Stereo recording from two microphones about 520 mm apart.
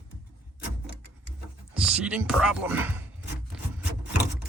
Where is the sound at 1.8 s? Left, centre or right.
Centre.